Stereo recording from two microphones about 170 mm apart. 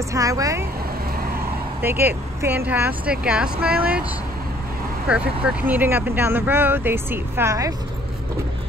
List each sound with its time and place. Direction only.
0.1 s speech: 20° right (ahead or behind)
1.8 s speech: 10° right (ahead or behind)
5.0 s speech: 5° right (ahead or behind)